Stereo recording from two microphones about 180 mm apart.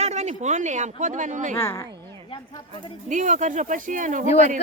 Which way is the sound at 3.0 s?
45° right (ahead or behind).